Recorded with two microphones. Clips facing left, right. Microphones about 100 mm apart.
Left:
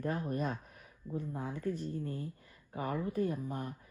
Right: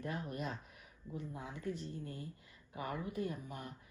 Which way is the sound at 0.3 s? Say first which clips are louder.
Left 6 dB; 50° left (ahead or behind).